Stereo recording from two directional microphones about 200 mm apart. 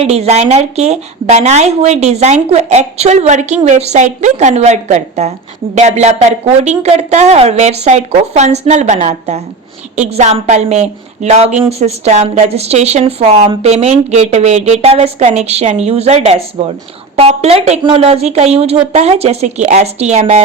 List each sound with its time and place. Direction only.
0.0 s a woman's voice: 30° right (ahead or behind)